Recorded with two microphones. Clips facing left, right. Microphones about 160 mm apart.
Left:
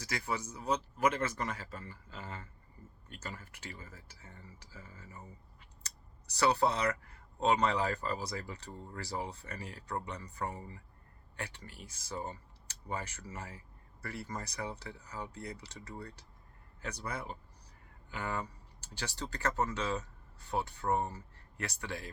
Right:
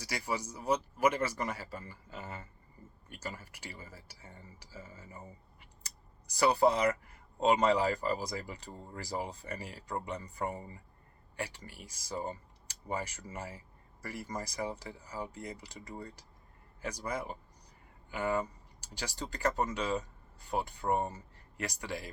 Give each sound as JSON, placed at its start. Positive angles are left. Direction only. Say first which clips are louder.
{"t": 0.0, "sound": "speech", "louder": "right 1 dB", "side_deg": -10}
{"t": 18.8, "sound": "speech", "louder": "right 1 dB", "side_deg": -10}